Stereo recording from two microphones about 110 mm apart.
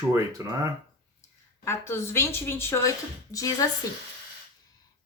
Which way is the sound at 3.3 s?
30° left (ahead or behind).